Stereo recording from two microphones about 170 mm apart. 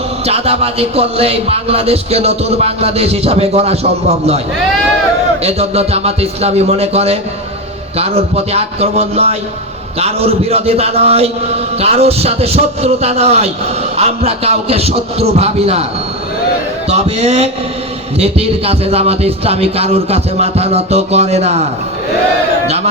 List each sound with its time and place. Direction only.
0.3 s speech: 35° right (ahead or behind)
5.4 s speech: 40° right (ahead or behind)
16.9 s speech: 40° right (ahead or behind)